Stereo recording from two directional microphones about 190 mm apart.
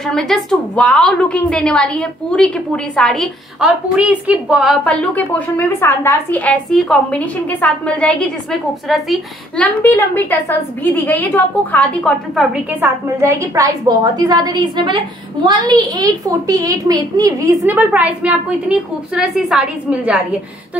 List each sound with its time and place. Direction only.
0.0 s a woman's voice: centre (ahead or behind)
12.8 s a woman's voice: 15° right (ahead or behind)
17.6 s a woman's voice: 10° right (ahead or behind)